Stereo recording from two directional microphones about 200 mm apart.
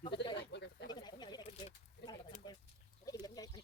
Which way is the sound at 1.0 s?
20° left (ahead or behind).